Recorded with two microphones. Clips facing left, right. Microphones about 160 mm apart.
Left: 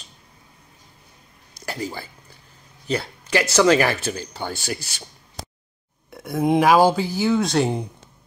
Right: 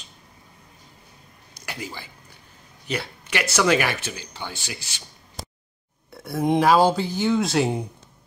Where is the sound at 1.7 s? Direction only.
35° left (ahead or behind).